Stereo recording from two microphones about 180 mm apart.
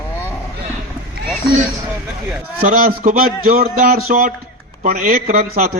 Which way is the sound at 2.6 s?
50° right (ahead or behind).